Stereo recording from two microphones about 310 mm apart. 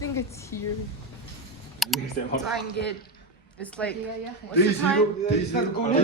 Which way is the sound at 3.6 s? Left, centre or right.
Centre.